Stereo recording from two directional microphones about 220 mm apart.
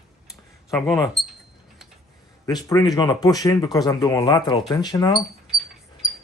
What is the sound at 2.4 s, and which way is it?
Speech, 15° left (ahead or behind).